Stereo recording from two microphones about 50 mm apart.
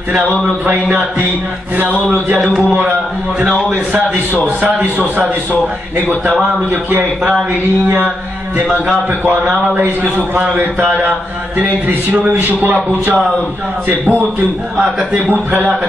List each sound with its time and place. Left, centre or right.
3.7 s a man's voice: right
4.6 s speech: right
6.7 s a man's voice: right
9.2 s a man's voice: right
11.0 s a man's voice: right